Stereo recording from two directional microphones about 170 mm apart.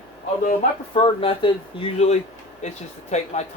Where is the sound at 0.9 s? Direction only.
35° left (ahead or behind).